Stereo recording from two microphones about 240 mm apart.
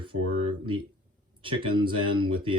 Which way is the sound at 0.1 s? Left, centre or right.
Right.